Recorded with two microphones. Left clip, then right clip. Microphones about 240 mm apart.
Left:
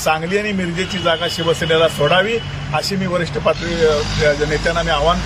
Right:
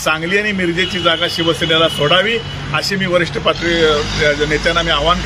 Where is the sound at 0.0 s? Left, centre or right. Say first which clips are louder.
Right 2 dB; centre.